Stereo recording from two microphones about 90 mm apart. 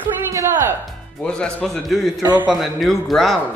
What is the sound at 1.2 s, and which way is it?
A man's voice, 10° left (ahead or behind).